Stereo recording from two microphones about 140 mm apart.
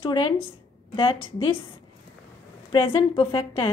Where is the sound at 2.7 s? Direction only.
40° left (ahead or behind).